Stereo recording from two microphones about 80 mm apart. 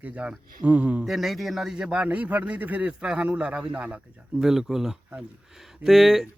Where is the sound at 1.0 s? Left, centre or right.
Centre.